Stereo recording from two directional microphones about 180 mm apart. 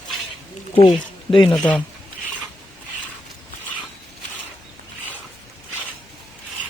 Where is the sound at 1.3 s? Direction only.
25° left (ahead or behind).